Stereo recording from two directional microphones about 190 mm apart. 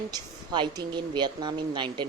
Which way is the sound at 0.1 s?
20° right (ahead or behind).